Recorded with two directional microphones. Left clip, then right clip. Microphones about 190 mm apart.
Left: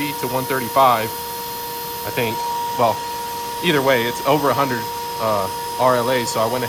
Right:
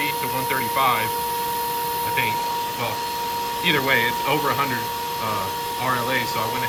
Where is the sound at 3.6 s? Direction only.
10° left (ahead or behind).